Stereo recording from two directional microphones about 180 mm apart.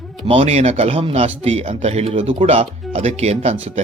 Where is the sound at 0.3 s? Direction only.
35° right (ahead or behind).